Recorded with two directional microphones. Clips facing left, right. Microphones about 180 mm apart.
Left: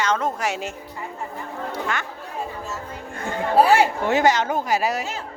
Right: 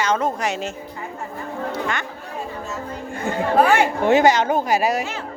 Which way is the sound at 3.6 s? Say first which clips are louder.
Left 1 dB; 35° left (ahead or behind).